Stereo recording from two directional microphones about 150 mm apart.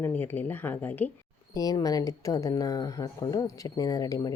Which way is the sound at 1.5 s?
25° left (ahead or behind).